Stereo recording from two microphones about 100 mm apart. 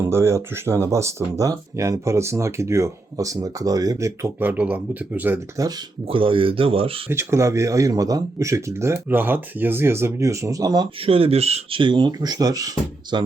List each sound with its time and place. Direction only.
0.0 s speech: 25° right (ahead or behind)
4.4 s speech: 15° right (ahead or behind)
5.6 s speech: 35° right (ahead or behind)
6.1 s speech: 60° right (ahead or behind)
7.1 s speech: 30° right (ahead or behind)
11.0 s speech: 75° right (ahead or behind); by 11.8 s 90° right
11.8 s speech: 50° right (ahead or behind)